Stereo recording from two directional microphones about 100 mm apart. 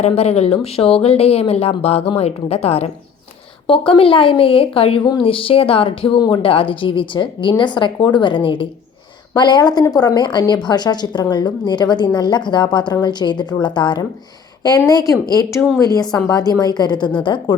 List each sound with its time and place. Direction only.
0.0 s speech: 90° left
0.6 s a woman's voice: 75° left (ahead or behind); by 2.9 s 90° left
3.7 s speech: 65° left (ahead or behind)
5.0 s speech: 60° left (ahead or behind)
6.1 s a woman's voice: 45° left (ahead or behind)
6.4 s a woman's voice: 70° left (ahead or behind); by 17.5 s 55° left (ahead or behind)